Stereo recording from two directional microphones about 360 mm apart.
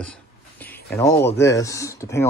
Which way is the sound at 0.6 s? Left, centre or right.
Centre.